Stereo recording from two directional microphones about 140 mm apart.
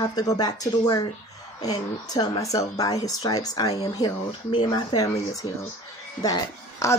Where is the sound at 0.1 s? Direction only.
25° left (ahead or behind).